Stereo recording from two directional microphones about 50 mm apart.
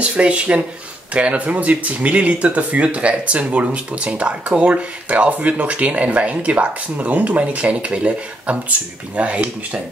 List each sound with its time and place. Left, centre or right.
0.0 s speech: right